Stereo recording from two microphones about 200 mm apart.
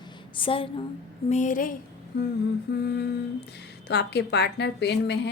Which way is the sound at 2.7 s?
55° left (ahead or behind).